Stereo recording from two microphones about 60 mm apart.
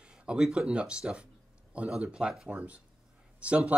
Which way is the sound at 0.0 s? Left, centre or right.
Centre.